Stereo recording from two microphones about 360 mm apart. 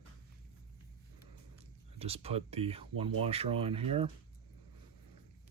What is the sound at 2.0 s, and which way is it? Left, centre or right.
Speech, centre.